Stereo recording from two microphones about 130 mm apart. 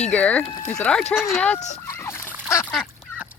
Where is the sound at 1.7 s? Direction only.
20° left (ahead or behind).